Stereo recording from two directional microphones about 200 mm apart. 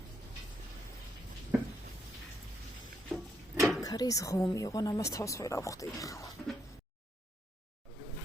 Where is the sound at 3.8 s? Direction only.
20° left (ahead or behind).